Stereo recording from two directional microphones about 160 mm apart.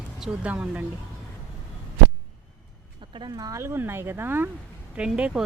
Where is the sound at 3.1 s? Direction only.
25° right (ahead or behind).